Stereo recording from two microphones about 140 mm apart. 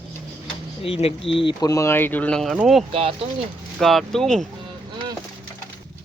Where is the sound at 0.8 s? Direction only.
45° left (ahead or behind); by 2.9 s 5° right (ahead or behind).